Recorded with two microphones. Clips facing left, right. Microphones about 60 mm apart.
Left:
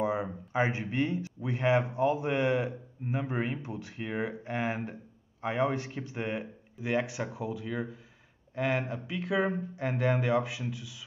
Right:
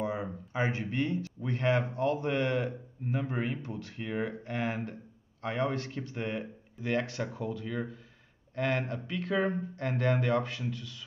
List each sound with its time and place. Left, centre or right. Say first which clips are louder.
0.0 s speech: left 3 dB; centre